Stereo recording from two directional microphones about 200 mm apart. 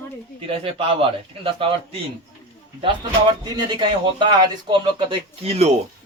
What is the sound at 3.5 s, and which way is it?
A man's voice, 20° right (ahead or behind).